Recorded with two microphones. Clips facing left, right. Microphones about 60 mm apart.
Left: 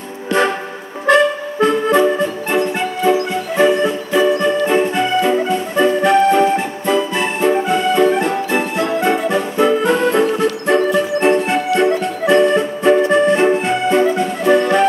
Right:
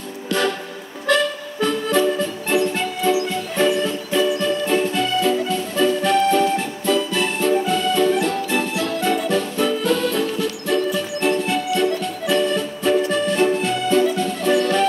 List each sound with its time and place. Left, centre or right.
0.3 s music: left